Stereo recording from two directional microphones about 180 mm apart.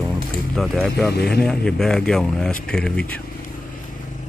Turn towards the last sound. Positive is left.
turn(degrees=5)  # may be behind; listen again after turning